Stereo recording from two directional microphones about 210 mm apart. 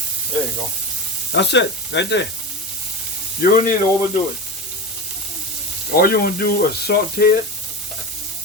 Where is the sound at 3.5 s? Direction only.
40° left (ahead or behind).